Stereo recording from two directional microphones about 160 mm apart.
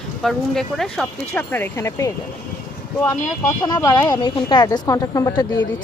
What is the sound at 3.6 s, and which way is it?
Speech, 25° left (ahead or behind).